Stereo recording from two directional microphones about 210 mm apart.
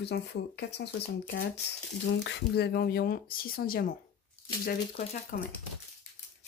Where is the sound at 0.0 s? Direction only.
50° left (ahead or behind).